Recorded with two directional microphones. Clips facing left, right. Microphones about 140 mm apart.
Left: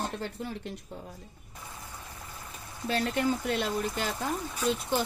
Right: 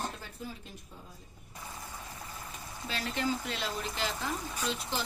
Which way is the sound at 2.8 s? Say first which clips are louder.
Left 6 dB; 55° left (ahead or behind).